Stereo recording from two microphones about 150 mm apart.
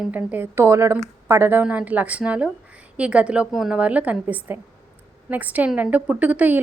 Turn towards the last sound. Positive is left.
turn(degrees=-10)  # may be behind; listen again after turning